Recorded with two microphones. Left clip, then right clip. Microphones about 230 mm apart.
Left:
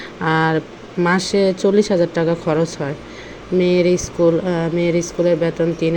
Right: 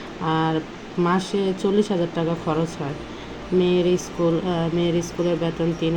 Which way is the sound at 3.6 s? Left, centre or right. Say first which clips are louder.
Left 6 dB; left.